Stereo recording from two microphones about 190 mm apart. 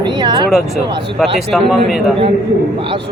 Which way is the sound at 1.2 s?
Centre (ahead or behind).